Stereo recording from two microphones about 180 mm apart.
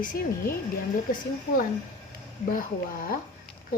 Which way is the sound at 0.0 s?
50° left (ahead or behind).